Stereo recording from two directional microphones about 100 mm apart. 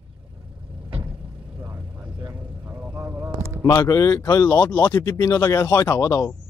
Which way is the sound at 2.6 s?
15° right (ahead or behind).